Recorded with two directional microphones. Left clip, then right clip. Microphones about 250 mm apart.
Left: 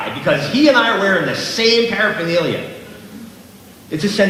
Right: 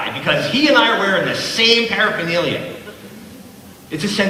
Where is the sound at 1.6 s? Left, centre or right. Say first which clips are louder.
Even; right.